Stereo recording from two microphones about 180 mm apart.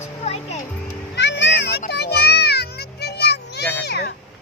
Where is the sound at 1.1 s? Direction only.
75° left (ahead or behind).